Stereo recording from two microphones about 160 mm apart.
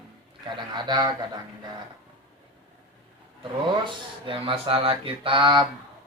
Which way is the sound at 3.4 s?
30° right (ahead or behind).